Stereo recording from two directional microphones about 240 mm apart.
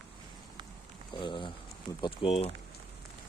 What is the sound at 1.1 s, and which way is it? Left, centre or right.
Speech, centre.